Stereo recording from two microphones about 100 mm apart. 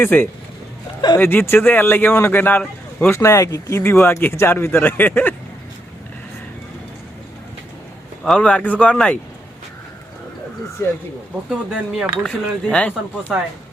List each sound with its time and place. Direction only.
0.0 s speech: 20° left (ahead or behind)
3.1 s speech: 30° left (ahead or behind)
8.2 s speech: 5° left (ahead or behind)
10.8 s speech: 25° left (ahead or behind)
11.4 s speech: 5° right (ahead or behind)
12.3 s speech: 10° left (ahead or behind)